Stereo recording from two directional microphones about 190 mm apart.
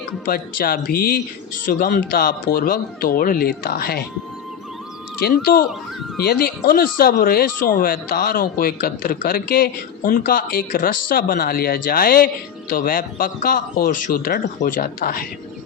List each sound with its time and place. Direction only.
0.3 s speech: 50° left (ahead or behind)
5.2 s speech: 50° left (ahead or behind)